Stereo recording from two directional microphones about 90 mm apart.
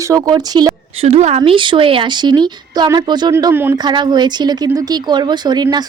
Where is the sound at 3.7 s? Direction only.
55° right (ahead or behind).